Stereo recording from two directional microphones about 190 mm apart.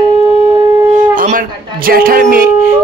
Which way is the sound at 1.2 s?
45° right (ahead or behind).